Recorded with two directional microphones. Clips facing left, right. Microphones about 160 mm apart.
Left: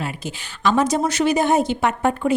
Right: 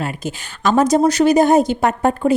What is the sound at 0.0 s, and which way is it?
A woman's voice, 45° right (ahead or behind).